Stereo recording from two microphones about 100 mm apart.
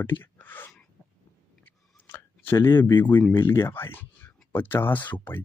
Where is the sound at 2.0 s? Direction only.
20° left (ahead or behind).